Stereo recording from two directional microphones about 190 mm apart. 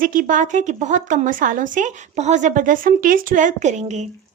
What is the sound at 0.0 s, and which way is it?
A woman's voice, 45° right (ahead or behind).